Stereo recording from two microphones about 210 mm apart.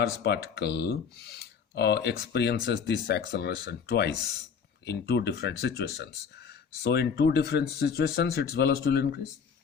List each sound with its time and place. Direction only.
0.0 s speech: 50° left (ahead or behind)